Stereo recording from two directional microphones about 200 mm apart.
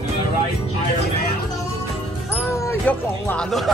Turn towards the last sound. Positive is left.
turn(degrees=0)  # may be behind; listen again after turning